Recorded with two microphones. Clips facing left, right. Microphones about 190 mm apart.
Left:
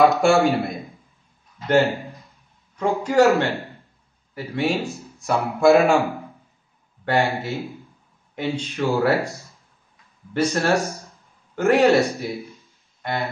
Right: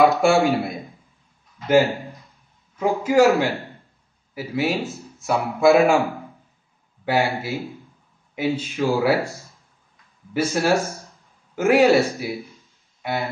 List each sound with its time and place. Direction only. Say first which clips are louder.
0.0 s speech: even; centre (ahead or behind)
9.2 s speech: even; 15° left (ahead or behind)
10.5 s speech: right 1 dB; centre (ahead or behind)
13.0 s a sound: right 1 dB; 5° right (ahead or behind)